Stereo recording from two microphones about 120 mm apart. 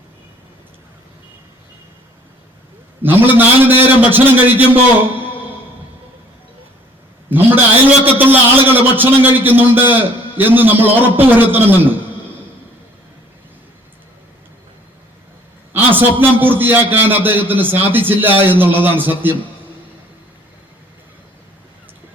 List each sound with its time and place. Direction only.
3.0 s a man's voice: 15° right (ahead or behind)
7.3 s a sound: 15° right (ahead or behind)
8.0 s a man's voice: 15° right (ahead or behind)
16.0 s a man's voice: 15° right (ahead or behind)